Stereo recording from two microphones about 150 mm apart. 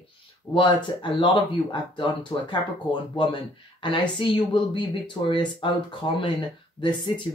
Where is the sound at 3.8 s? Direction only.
35° left (ahead or behind).